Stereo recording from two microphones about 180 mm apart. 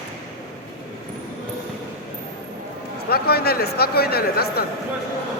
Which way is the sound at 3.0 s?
60° left (ahead or behind).